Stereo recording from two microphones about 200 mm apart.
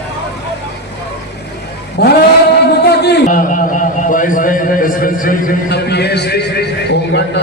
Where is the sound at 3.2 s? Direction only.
40° left (ahead or behind).